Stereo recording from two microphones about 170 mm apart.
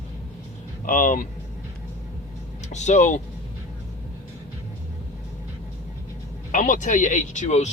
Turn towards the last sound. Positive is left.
turn(degrees=40)  # may be behind; listen again after turning